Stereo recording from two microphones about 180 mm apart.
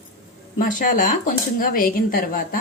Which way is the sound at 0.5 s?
45° left (ahead or behind).